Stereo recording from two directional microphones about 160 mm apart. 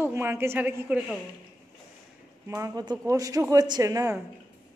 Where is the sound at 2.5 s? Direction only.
20° right (ahead or behind).